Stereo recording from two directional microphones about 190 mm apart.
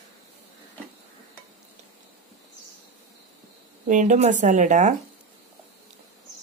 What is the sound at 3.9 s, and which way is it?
Speech, 40° right (ahead or behind).